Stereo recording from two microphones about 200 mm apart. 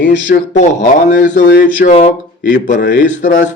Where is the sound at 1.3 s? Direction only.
60° left (ahead or behind).